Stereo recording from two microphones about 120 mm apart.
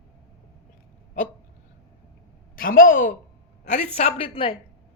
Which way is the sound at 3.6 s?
80° left.